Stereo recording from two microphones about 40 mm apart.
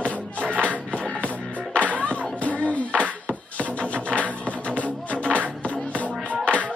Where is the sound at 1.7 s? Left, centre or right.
Left.